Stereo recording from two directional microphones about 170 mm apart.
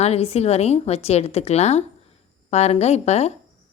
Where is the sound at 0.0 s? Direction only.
35° left (ahead or behind).